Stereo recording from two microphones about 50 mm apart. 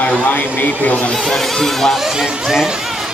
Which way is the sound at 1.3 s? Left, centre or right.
Centre.